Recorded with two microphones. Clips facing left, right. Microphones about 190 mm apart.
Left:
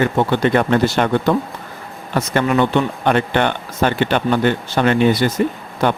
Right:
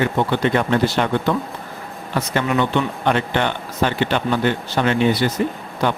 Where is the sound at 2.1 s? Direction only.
50° left (ahead or behind).